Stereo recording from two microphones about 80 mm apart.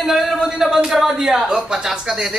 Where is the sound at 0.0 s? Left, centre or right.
Centre.